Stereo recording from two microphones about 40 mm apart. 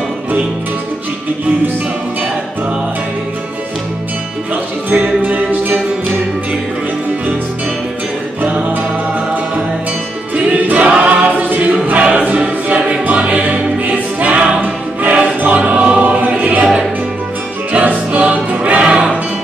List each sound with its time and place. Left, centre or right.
5.0 s music: right
10.3 s choir: right
13.0 s music: right
14.6 s choir: right
15.4 s music: right
16.3 s music: right
17.7 s music: right
18.9 s music: right